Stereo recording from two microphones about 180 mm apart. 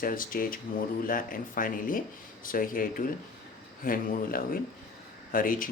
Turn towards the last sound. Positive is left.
turn(degrees=50)  # may be behind; listen again after turning